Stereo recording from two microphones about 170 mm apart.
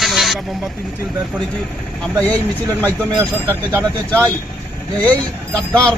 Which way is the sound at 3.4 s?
10° right (ahead or behind).